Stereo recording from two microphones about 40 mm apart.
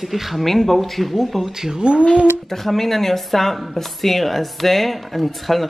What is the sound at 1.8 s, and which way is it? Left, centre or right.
Speech, right.